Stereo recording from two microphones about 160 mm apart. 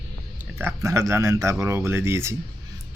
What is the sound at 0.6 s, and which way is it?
Speech, 15° right (ahead or behind).